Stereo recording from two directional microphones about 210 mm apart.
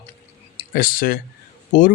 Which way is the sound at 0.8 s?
45° left (ahead or behind).